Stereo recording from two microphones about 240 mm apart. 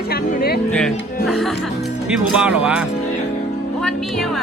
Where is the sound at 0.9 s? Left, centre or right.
Left.